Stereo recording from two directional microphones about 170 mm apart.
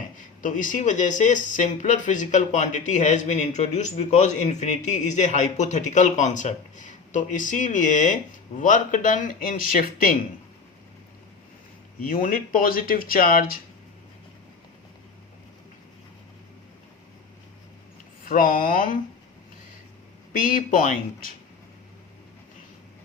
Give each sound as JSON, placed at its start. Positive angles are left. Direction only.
{"t": 0.4, "sound": "speech", "side_deg": 50}
{"t": 12.0, "sound": "speech", "side_deg": 55}
{"t": 18.3, "sound": "speech", "side_deg": 55}
{"t": 20.3, "sound": "speech", "side_deg": 55}